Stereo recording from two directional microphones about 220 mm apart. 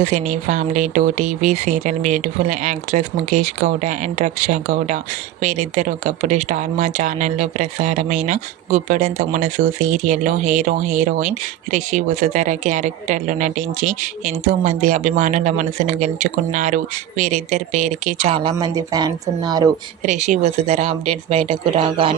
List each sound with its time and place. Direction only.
0.0 s speech: 35° right (ahead or behind); by 19.7 s 15° right (ahead or behind)
20.0 s speech: 30° right (ahead or behind)